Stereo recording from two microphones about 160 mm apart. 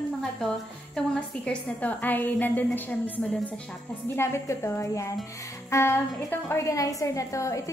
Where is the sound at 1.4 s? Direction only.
10° left (ahead or behind).